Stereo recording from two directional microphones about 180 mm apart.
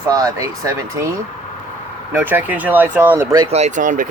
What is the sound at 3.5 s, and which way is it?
Speech, 40° right (ahead or behind).